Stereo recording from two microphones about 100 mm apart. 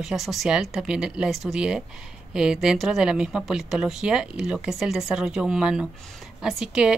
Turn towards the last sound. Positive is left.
turn(degrees=-5)  # may be behind; listen again after turning